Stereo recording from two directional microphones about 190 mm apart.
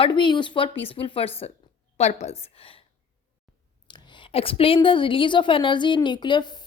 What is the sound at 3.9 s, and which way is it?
A woman's voice, 25° left (ahead or behind).